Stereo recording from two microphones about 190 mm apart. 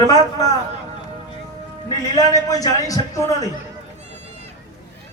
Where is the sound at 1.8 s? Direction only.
20° left (ahead or behind).